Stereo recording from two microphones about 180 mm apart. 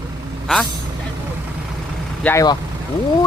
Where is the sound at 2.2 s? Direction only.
10° left (ahead or behind).